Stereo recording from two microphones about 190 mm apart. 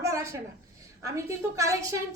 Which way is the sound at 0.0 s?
15° right (ahead or behind).